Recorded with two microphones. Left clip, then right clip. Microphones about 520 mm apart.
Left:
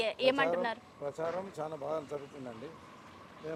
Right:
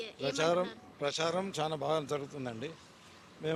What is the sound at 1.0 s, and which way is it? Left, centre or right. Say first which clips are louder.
A man's voice: right 4 dB; right.